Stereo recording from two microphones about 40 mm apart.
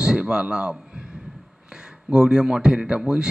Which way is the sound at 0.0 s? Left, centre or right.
Centre.